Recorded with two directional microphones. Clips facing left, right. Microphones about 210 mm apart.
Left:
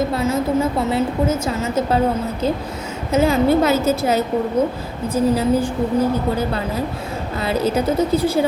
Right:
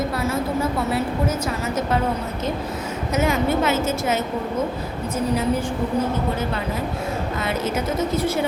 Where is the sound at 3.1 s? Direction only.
30° left (ahead or behind).